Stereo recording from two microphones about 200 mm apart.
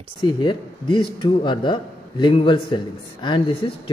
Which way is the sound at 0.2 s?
25° left (ahead or behind).